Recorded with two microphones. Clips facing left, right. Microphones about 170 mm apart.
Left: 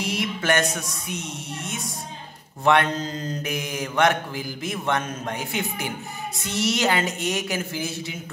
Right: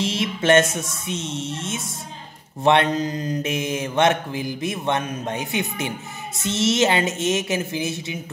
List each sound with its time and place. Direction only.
0.0 s mantra: 25° right (ahead or behind)